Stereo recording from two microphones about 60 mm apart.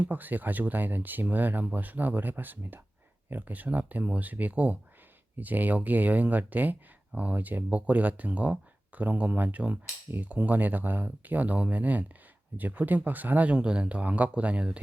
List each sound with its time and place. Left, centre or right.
0.0 s speech: right